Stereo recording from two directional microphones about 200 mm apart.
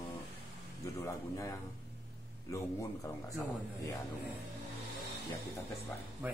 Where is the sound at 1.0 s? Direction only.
15° left (ahead or behind).